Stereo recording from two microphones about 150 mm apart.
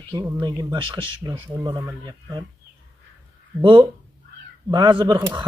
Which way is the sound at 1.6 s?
25° right (ahead or behind).